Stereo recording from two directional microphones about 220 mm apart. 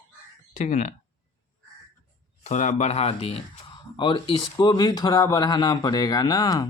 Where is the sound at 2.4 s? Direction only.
35° left (ahead or behind).